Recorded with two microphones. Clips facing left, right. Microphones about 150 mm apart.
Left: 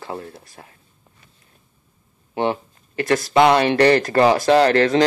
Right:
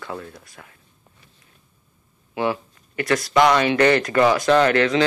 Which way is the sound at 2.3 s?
30° left (ahead or behind).